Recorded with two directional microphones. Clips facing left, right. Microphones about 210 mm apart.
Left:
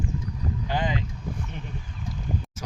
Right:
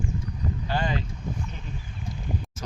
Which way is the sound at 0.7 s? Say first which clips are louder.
Even; 15° left (ahead or behind).